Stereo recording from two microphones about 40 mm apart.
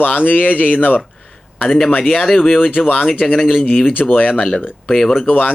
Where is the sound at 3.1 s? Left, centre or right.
Centre.